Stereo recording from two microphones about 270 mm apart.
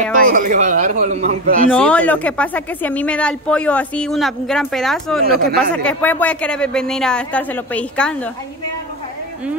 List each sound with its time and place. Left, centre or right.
0.2 s a man's voice: right
1.7 s a woman's voice: centre